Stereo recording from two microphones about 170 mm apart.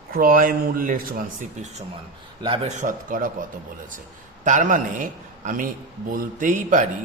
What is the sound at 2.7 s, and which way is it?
Speech, 45° right (ahead or behind).